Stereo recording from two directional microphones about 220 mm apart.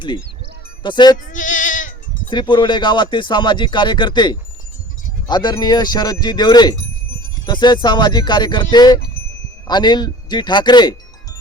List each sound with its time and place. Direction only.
0.8 s speech: 20° left (ahead or behind)
1.3 s bleat: 35° left (ahead or behind)
2.3 s speech: 20° left (ahead or behind)